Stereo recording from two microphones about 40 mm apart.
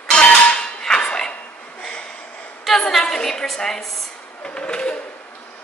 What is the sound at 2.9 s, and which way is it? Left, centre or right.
Speech, centre.